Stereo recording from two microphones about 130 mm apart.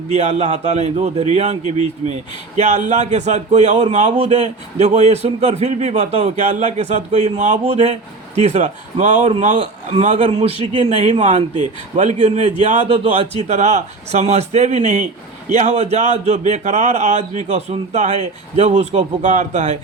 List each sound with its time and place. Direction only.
0.1 s speech: 55° right (ahead or behind)
7.6 s a man's voice: 55° right (ahead or behind); by 12.9 s 70° right (ahead or behind)
12.9 s speech: 55° right (ahead or behind)